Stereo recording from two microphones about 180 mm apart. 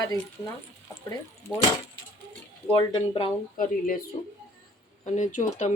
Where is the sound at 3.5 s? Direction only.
50° left (ahead or behind).